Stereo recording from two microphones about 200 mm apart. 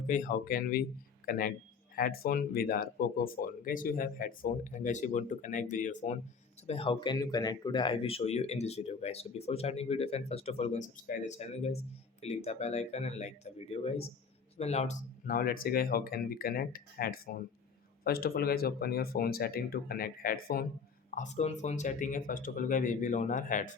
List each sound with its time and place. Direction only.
0.1 s speech: 40° left (ahead or behind)
6.7 s speech: 25° left (ahead or behind); by 20.7 s 45° left (ahead or behind)
21.2 s speech: 35° left (ahead or behind)